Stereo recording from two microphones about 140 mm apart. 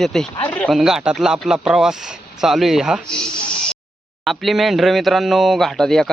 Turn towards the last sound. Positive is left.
turn(degrees=0)  # may be behind; listen again after turning